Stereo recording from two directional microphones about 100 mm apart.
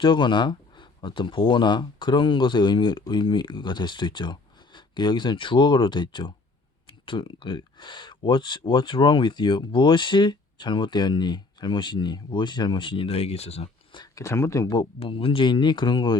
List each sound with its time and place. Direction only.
0.0 s speech: 50° left (ahead or behind); by 13.7 s 90° left
13.9 s a sound: 45° left (ahead or behind)
14.3 s speech: 30° left (ahead or behind)
14.9 s speech: 70° left (ahead or behind); by 16.1 s 50° left (ahead or behind)